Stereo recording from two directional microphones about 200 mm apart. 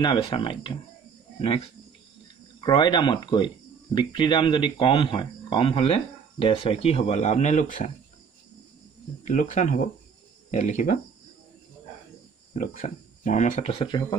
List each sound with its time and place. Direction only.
0.0 s speech: 25° left (ahead or behind)
9.2 s speech: 40° left (ahead or behind)
12.5 s speech: 40° left (ahead or behind)